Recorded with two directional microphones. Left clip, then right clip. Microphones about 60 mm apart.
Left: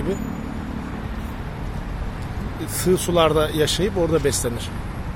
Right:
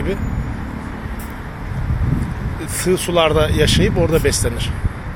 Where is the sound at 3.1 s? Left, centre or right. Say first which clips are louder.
Right 3 dB; left.